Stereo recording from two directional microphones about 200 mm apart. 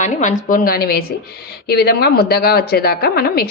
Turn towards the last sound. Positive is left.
turn(degrees=50)  # may be behind; listen again after turning